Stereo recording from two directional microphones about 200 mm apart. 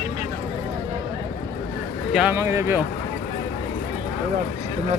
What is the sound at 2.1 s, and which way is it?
Speech, 5° right (ahead or behind).